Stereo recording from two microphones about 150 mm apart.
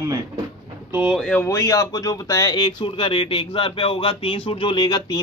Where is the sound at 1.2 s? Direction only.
10° left (ahead or behind).